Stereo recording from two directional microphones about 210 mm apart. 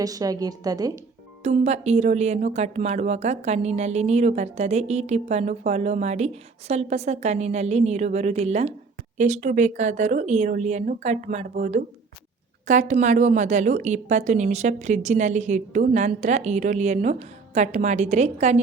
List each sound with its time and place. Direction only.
0.0 s a woman's voice: 15° right (ahead or behind)
1.5 s speech: 30° right (ahead or behind)